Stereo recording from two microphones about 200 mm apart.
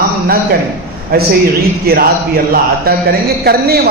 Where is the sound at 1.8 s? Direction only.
50° right (ahead or behind).